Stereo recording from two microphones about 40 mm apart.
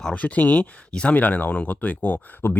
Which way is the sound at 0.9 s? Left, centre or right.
Left.